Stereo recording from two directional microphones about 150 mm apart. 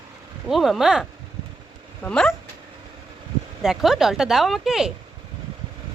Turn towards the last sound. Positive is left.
turn(degrees=-5)  # may be behind; listen again after turning